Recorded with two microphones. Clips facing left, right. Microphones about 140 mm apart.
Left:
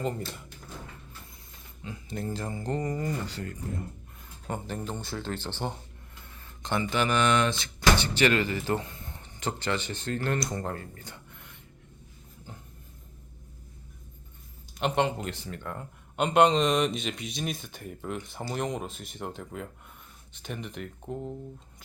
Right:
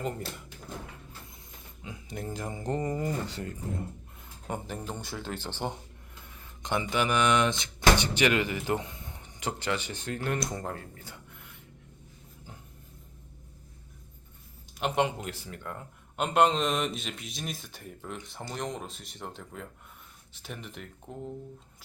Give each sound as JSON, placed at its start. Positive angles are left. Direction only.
{"t": 1.8, "sound": "speech", "side_deg": -15}
{"t": 4.4, "sound": "speech", "side_deg": -10}
{"t": 14.8, "sound": "speech", "side_deg": -5}